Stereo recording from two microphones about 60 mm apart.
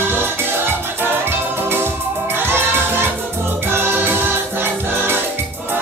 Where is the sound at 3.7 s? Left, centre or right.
Right.